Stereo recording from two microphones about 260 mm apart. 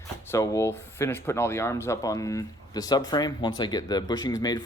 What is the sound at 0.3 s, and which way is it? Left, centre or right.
Speech, centre.